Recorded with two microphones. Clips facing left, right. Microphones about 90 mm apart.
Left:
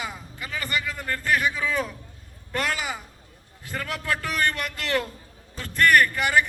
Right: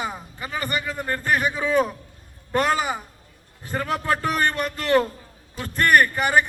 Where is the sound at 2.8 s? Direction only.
45° right (ahead or behind).